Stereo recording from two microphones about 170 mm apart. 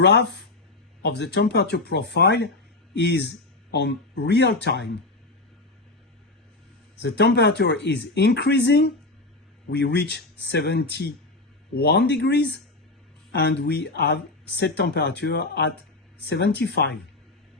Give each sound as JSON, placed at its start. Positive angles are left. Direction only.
{"t": 0.0, "sound": "speech", "side_deg": 80}
{"t": 7.0, "sound": "speech", "side_deg": 80}
{"t": 11.7, "sound": "speech", "side_deg": 70}